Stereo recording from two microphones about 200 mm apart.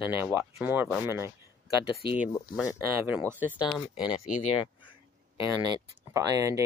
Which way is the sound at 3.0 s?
10° right (ahead or behind).